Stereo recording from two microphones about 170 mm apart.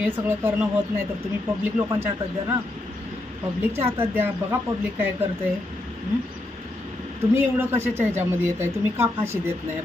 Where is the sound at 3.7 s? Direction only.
15° right (ahead or behind).